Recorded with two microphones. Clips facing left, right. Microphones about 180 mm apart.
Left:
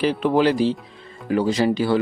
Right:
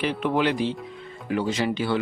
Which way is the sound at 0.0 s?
35° left (ahead or behind).